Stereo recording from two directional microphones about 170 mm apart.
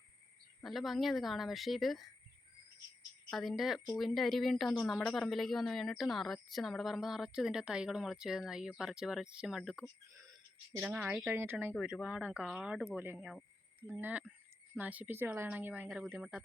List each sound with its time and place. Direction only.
0.6 s a woman's voice: centre (ahead or behind)
3.2 s a woman's voice: centre (ahead or behind)
9.8 s speech: 20° right (ahead or behind)
10.8 s a woman's voice: 5° right (ahead or behind)
11.7 s a woman's voice: centre (ahead or behind)